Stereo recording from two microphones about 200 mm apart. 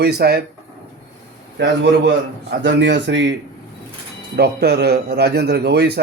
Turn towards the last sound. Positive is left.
turn(degrees=-55)  # may be behind; listen again after turning